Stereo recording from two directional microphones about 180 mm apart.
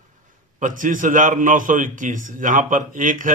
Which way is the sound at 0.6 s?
45° right (ahead or behind).